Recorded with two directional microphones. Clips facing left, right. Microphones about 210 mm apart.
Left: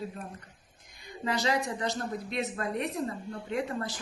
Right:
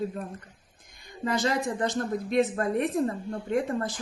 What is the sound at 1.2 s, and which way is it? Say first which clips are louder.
Speech: right 3 dB; 50° right (ahead or behind).